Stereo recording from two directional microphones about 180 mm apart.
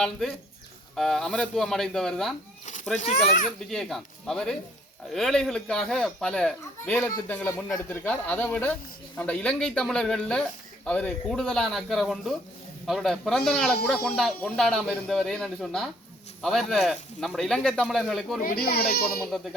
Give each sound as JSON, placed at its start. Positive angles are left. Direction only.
{"t": 0.0, "sound": "speech", "side_deg": 5}
{"t": 3.0, "sound": "a child's voice", "side_deg": 45}
{"t": 3.7, "sound": "speech", "side_deg": 0}
{"t": 18.4, "sound": "speech", "side_deg": 55}